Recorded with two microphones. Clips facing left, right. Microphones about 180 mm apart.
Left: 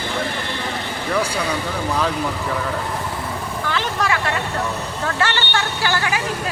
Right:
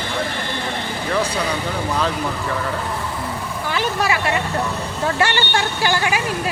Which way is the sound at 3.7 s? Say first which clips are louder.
Right 2 dB; 10° right (ahead or behind).